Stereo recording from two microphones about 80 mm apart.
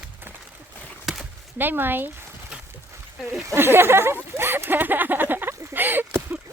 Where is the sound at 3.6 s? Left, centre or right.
Right.